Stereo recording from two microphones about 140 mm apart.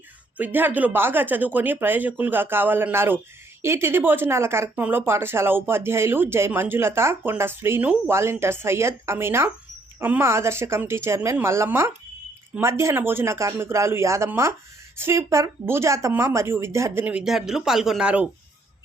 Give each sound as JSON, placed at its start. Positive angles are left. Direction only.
{"t": 0.3, "sound": "speech", "side_deg": -15}